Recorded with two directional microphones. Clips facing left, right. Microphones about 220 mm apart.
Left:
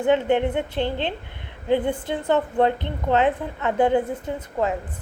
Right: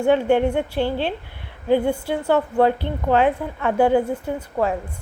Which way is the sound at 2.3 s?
20° left (ahead or behind).